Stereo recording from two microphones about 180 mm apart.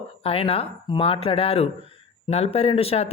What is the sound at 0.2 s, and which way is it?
Speech, 30° left (ahead or behind).